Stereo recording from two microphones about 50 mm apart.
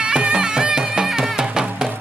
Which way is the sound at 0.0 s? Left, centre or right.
Centre.